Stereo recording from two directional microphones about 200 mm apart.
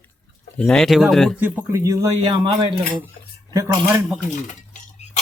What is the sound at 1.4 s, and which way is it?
A man's voice, 10° right (ahead or behind).